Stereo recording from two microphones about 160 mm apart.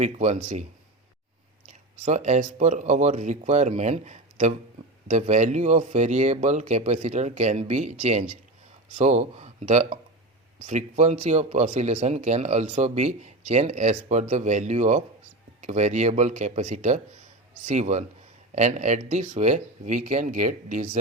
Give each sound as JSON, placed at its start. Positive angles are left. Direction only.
{"t": 0.0, "sound": "speech", "side_deg": -45}